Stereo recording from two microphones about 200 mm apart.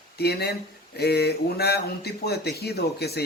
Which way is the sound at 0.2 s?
55° left (ahead or behind).